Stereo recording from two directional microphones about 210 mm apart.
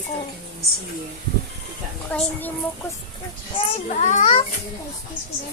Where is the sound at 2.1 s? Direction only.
10° left (ahead or behind).